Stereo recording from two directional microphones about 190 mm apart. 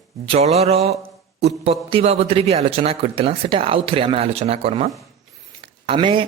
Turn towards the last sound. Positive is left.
turn(degrees=-30)  # may be behind; listen again after turning